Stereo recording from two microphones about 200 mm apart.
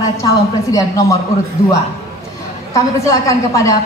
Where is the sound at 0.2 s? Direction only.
15° left (ahead or behind).